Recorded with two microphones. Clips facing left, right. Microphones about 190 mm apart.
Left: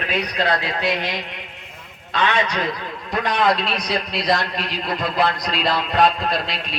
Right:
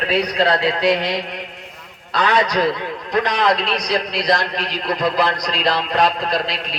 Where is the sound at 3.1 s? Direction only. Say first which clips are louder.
Right 2 dB; centre (ahead or behind).